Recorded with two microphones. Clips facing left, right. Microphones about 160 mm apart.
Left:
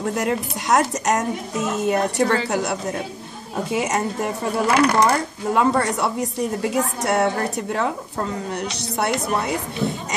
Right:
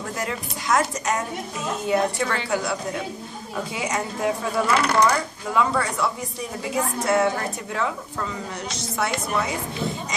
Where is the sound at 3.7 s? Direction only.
70° left (ahead or behind).